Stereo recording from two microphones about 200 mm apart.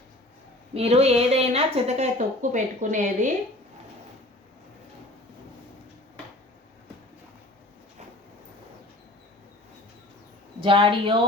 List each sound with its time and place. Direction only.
0.7 s speech: 30° right (ahead or behind)
10.6 s a woman's voice: 25° right (ahead or behind)